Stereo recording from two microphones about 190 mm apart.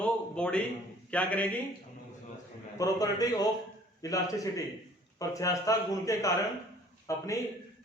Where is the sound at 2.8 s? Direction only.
20° left (ahead or behind).